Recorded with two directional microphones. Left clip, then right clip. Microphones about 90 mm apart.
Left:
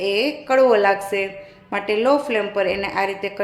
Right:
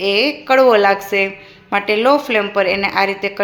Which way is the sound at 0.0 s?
20° right (ahead or behind).